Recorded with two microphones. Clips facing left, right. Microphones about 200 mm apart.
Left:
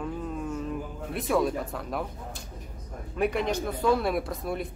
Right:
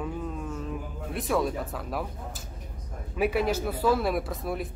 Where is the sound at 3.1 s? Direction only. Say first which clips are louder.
Right 1 dB; 5° right (ahead or behind).